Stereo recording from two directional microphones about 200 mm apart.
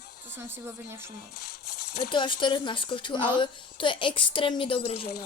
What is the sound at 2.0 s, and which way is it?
A woman's voice, 25° left (ahead or behind).